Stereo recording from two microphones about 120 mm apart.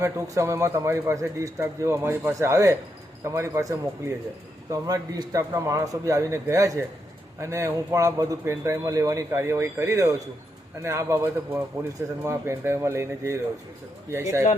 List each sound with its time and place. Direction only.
0.0 s speech: 25° right (ahead or behind)